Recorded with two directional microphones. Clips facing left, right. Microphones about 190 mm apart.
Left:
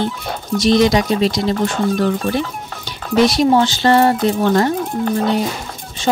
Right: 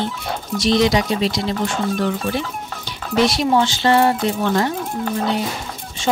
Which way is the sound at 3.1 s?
40° left (ahead or behind).